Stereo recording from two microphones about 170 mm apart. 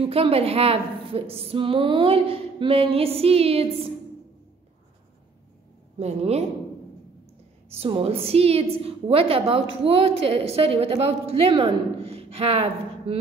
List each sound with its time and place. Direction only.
0.0 s speech: 35° right (ahead or behind)
5.9 s speech: 40° right (ahead or behind)
7.7 s speech: 35° right (ahead or behind)